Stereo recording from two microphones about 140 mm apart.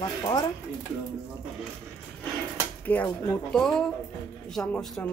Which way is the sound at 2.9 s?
10° left (ahead or behind).